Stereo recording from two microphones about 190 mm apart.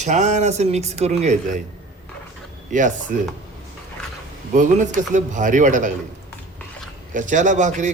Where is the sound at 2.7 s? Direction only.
40° right (ahead or behind).